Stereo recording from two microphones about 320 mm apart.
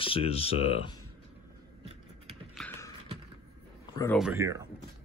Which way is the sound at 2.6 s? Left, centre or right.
Centre.